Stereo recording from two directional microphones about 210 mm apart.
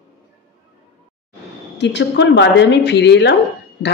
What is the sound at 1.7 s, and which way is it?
Speech, 55° left (ahead or behind).